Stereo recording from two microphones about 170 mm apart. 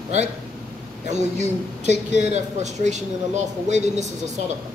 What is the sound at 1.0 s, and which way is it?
A man's voice, 45° right (ahead or behind).